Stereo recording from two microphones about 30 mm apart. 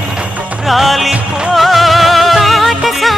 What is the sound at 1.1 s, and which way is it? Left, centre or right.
Music, right.